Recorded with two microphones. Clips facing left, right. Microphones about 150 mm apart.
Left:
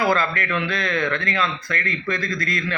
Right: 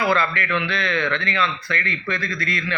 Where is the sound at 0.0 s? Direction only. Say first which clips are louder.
Even; 45° left (ahead or behind).